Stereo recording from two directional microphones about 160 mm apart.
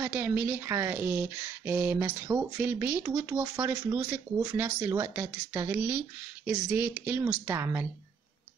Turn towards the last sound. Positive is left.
turn(degrees=-15)  # may be behind; listen again after turning